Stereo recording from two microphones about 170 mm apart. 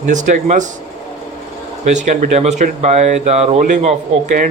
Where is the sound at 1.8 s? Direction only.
45° right (ahead or behind).